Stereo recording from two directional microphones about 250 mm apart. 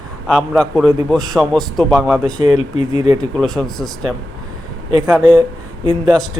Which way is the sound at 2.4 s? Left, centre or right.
Centre.